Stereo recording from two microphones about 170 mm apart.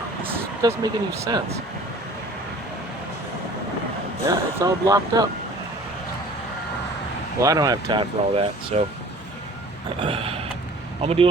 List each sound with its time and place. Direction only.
0.7 s speech: 20° right (ahead or behind)
4.3 s speech: 20° right (ahead or behind)
7.3 s speech: 20° right (ahead or behind)
10.0 s a sound: 35° right (ahead or behind)